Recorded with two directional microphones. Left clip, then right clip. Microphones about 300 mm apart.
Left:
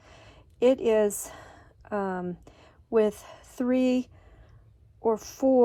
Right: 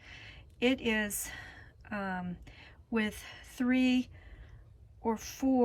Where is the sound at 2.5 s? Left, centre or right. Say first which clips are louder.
Left 11 dB; centre.